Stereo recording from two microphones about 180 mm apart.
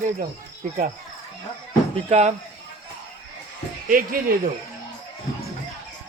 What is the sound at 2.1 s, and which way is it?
Speech, 40° right (ahead or behind).